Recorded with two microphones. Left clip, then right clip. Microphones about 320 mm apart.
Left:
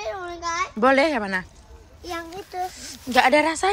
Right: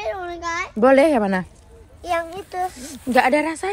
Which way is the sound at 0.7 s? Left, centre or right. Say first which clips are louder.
Right 5 dB; centre.